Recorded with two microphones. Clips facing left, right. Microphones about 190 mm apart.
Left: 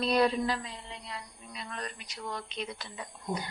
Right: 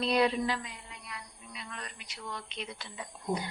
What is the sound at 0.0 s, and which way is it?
Speech, 40° left (ahead or behind).